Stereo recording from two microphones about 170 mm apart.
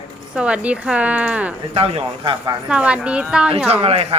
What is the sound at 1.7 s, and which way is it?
Speech, 35° right (ahead or behind).